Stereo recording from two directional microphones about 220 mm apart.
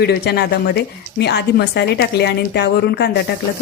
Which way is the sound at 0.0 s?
50° left (ahead or behind).